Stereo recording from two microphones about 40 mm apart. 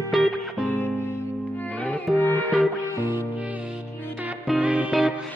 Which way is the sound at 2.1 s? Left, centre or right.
Left.